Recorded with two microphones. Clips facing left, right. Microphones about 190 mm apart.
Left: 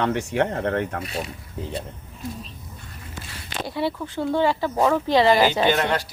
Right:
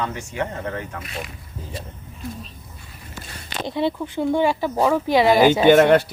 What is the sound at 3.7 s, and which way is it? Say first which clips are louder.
Speech: right 4 dB; 20° right (ahead or behind).